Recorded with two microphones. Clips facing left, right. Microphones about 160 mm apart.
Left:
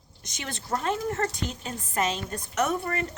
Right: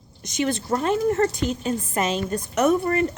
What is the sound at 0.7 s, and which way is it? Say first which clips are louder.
Speech: right 4 dB; 25° right (ahead or behind).